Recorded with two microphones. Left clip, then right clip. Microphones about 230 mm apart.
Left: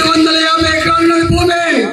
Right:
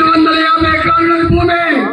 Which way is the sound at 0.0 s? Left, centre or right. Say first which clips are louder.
Right 1 dB; left.